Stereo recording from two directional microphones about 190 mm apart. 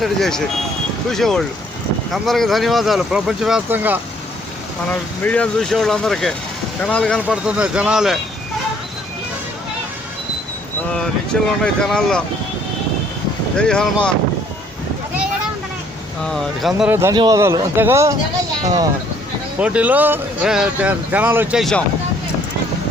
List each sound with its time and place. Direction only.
0.0 s speech: centre (ahead or behind)
4.9 s speech: 5° left (ahead or behind)
11.6 s speech: 5° left (ahead or behind)
13.6 s speech: 5° left (ahead or behind)
16.2 s speech: centre (ahead or behind)
16.9 s speech: 15° right (ahead or behind)
19.5 s speech: 5° right (ahead or behind)
21.6 s speech: 5° left (ahead or behind)